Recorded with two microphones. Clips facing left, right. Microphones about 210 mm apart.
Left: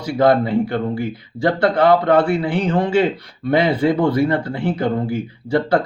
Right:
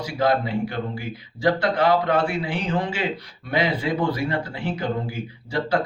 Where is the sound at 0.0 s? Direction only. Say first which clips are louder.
Left 7 dB; 55° left (ahead or behind).